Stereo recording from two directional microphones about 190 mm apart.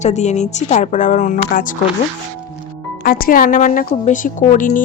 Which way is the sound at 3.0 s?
50° left (ahead or behind).